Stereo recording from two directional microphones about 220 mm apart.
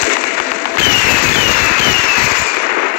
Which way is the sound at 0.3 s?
45° left (ahead or behind).